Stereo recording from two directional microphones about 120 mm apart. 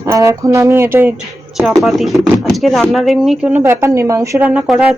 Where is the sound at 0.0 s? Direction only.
25° right (ahead or behind).